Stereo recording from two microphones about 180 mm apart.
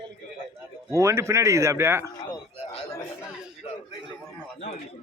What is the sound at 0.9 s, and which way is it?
Speech, 15° right (ahead or behind).